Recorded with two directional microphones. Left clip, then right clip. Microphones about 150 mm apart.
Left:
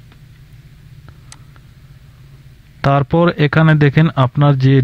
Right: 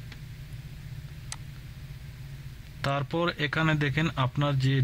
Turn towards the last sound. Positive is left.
turn(degrees=45)  # may be behind; listen again after turning